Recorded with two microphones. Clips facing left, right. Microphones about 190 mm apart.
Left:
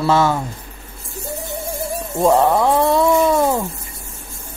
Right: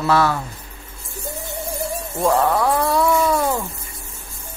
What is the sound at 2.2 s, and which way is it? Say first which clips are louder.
Speech: left 4 dB; 25° left (ahead or behind).